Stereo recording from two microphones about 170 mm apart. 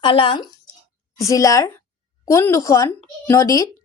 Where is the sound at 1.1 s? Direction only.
20° left (ahead or behind).